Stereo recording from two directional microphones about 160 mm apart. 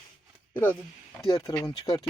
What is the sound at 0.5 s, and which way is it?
Speech, 10° left (ahead or behind).